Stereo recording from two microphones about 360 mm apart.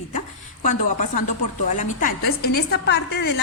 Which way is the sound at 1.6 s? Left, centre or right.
Left.